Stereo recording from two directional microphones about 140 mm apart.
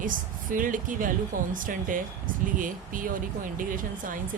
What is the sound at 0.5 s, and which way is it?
Speech, 70° right (ahead or behind).